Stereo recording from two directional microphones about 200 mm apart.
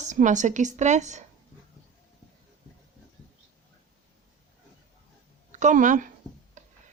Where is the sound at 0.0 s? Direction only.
35° right (ahead or behind).